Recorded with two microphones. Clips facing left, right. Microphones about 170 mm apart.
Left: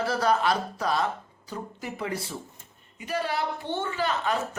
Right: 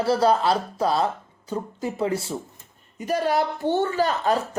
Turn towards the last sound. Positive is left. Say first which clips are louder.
# right 6 dB
turn(degrees=-40)  # may be behind; listen again after turning